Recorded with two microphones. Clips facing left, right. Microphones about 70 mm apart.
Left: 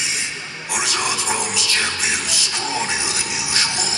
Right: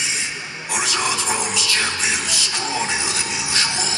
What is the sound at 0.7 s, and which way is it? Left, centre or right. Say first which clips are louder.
Speech: even; right.